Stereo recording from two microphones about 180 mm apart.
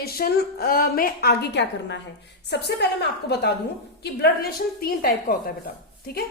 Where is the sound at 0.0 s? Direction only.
55° left (ahead or behind).